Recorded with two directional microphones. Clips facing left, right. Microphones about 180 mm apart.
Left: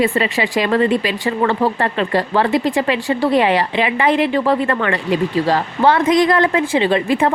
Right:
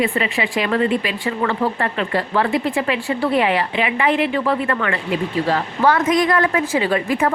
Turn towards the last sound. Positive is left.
turn(degrees=30)  # may be behind; listen again after turning